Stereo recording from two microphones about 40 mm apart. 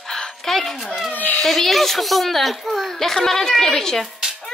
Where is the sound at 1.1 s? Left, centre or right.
Left.